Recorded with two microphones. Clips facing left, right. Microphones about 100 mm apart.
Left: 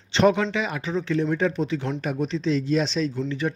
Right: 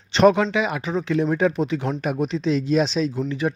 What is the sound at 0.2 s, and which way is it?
A man's voice, 60° right (ahead or behind).